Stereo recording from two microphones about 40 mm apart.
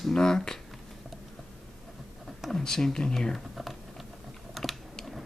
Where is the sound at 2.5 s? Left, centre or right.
Centre.